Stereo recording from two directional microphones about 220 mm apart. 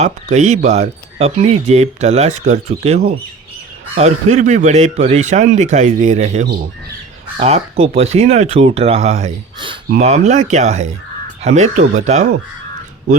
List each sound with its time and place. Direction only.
0.0 s speech: 30° right (ahead or behind)